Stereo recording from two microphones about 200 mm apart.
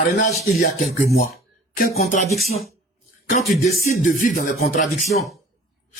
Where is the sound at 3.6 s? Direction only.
45° left (ahead or behind).